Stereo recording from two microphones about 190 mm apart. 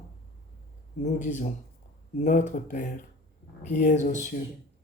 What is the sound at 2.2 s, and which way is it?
Speech, 40° left (ahead or behind).